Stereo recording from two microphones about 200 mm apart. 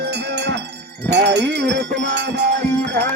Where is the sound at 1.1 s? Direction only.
60° right (ahead or behind).